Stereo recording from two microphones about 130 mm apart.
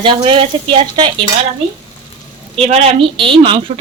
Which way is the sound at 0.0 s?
40° right (ahead or behind).